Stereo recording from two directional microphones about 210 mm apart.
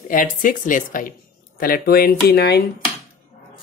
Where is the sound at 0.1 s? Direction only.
40° left (ahead or behind).